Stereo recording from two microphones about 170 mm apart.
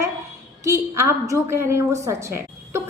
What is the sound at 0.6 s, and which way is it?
A woman's voice, 15° right (ahead or behind).